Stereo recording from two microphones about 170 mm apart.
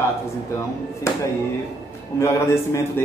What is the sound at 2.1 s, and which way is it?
Speech, 15° left (ahead or behind).